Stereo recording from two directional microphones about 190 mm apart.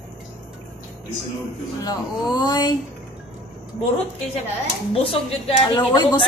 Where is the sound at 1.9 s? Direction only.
20° left (ahead or behind).